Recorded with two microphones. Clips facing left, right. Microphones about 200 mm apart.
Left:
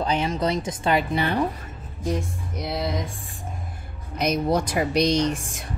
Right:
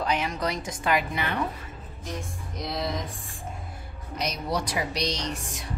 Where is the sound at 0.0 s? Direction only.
30° left (ahead or behind).